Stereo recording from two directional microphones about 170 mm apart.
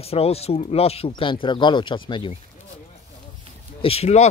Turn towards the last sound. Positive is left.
turn(degrees=40)  # may be behind; listen again after turning